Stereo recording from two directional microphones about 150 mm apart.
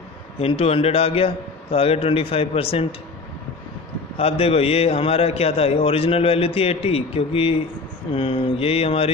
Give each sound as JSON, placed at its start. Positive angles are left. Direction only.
{"t": 0.4, "sound": "a man's voice", "side_deg": 40}
{"t": 4.2, "sound": "a man's voice", "side_deg": 40}